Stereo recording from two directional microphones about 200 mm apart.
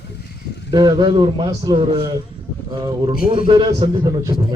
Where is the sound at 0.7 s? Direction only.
20° right (ahead or behind).